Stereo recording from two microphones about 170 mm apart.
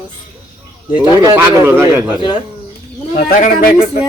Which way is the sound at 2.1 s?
30° left (ahead or behind).